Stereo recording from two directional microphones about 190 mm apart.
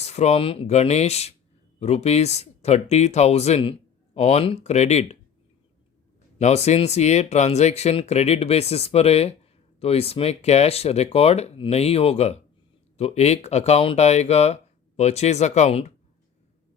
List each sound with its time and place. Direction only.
0.0 s speech: 35° left (ahead or behind)
6.4 s speech: 35° left (ahead or behind)